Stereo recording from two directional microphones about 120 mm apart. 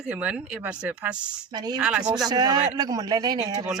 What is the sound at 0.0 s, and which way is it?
Speech, 10° right (ahead or behind).